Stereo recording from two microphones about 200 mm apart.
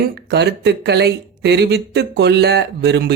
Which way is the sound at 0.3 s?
55° right (ahead or behind).